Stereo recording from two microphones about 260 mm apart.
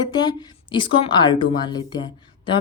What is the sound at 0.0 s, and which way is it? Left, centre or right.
A woman's voice, centre.